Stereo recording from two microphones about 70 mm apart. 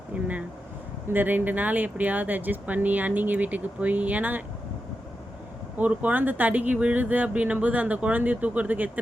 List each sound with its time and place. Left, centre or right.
0.1 s air conditioning: centre
1.1 s speech: right
5.7 s speech: right